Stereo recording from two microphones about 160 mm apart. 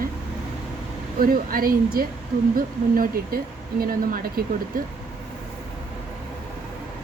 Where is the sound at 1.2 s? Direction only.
65° right (ahead or behind).